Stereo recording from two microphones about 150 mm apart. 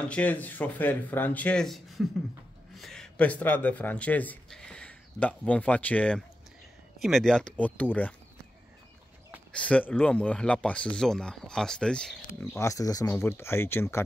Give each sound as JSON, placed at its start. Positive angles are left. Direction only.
{"t": 0.1, "sound": "speech", "side_deg": 10}
{"t": 9.5, "sound": "speech", "side_deg": 10}
{"t": 12.5, "sound": "speech", "side_deg": 20}